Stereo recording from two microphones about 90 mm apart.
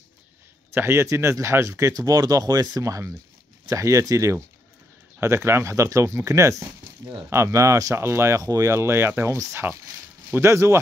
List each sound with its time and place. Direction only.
0.7 s speech: 30° right (ahead or behind)